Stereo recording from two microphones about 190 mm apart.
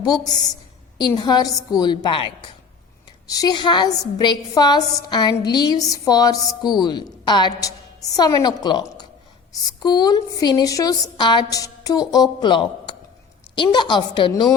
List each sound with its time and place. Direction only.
0.9 s a woman's voice: 20° left (ahead or behind)